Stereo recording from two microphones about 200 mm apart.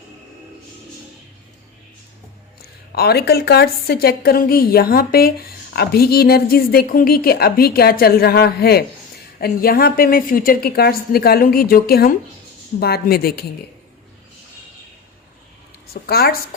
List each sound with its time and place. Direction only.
2.6 s a woman's voice: 50° left (ahead or behind)
15.9 s a woman's voice: 50° left (ahead or behind)